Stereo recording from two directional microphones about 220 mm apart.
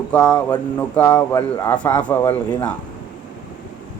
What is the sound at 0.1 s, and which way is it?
Speech, 5° left (ahead or behind).